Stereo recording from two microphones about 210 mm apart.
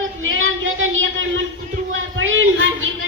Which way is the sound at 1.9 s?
65° right (ahead or behind).